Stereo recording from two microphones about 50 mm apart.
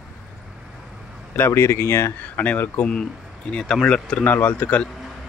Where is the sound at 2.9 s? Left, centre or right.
Centre.